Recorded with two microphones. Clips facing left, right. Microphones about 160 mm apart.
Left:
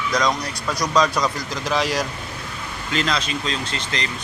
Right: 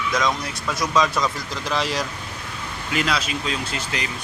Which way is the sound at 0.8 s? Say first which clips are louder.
Left 1 dB; 5° right (ahead or behind).